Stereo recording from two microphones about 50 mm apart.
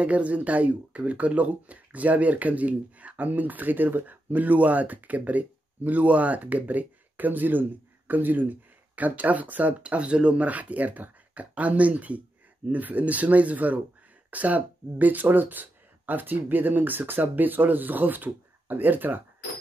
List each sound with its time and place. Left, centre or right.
0.0 s speech: right